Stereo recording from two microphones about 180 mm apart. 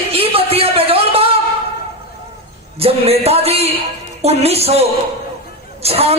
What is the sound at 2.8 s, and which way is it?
A man's voice, 35° right (ahead or behind).